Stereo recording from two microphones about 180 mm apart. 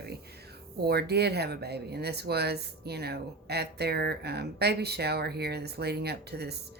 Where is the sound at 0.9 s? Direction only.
65° right (ahead or behind).